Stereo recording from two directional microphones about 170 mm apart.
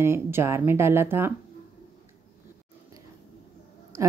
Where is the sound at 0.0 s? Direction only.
15° right (ahead or behind).